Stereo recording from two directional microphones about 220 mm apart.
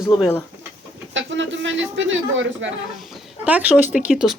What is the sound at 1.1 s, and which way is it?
Speech, 55° right (ahead or behind).